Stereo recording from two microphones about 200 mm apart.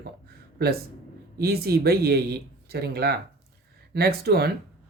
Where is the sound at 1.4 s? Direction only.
50° right (ahead or behind).